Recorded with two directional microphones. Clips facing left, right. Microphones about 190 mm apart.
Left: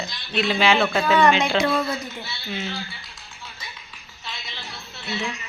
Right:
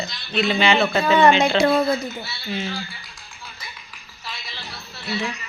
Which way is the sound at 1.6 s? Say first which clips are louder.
Right 4 dB; 30° right (ahead or behind).